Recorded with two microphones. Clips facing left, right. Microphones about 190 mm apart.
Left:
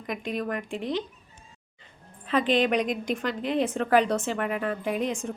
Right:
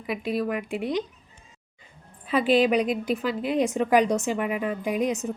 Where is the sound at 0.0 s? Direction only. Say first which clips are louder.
Right 4 dB; 5° right (ahead or behind).